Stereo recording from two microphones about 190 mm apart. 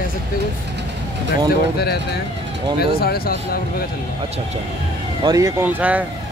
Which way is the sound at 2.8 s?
55° left (ahead or behind).